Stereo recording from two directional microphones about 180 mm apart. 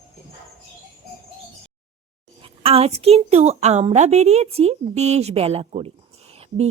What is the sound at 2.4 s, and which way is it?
A woman's voice, 30° right (ahead or behind).